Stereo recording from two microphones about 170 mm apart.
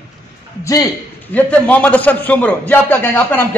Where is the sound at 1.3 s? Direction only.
10° left (ahead or behind).